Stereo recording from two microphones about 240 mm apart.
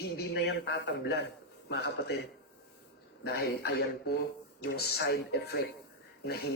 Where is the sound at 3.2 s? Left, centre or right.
Left.